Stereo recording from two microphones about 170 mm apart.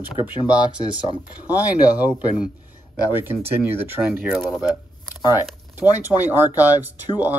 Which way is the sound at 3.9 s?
15° right (ahead or behind).